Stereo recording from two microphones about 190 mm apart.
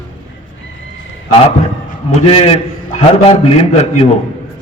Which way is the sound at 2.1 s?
30° left (ahead or behind).